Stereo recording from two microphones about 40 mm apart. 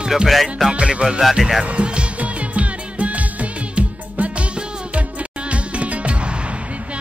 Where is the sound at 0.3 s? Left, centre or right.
Centre.